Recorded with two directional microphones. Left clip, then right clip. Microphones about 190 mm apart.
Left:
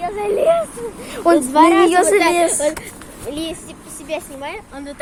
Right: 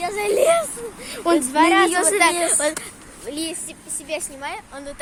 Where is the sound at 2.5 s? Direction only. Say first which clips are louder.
Left 3 dB; 40° right (ahead or behind).